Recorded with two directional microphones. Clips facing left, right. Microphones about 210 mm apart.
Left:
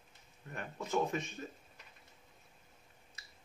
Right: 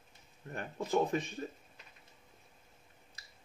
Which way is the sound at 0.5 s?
35° right (ahead or behind).